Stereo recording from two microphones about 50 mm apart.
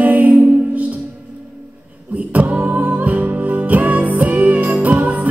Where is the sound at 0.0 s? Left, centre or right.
Right.